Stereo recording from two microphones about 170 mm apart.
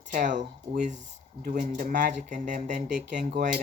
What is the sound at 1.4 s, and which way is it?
Speech, 50° right (ahead or behind).